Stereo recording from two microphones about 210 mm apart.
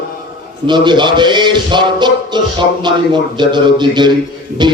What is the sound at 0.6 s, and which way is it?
Music, 20° right (ahead or behind).